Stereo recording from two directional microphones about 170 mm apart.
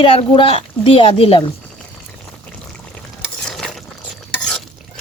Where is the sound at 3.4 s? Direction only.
5° left (ahead or behind).